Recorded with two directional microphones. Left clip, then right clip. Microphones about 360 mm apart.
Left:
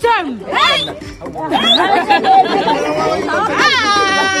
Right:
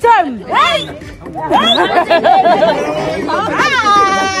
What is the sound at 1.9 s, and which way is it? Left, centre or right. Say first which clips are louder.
Chatter: right 1 dB; centre.